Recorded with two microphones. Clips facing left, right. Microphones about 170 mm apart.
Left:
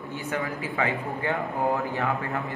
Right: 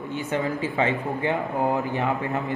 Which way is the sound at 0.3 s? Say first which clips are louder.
Right 4 dB; 20° right (ahead or behind).